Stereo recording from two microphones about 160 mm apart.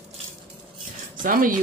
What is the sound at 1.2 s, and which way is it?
Speech, 60° right (ahead or behind).